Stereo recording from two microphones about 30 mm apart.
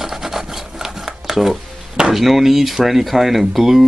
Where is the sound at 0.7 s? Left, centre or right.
Centre.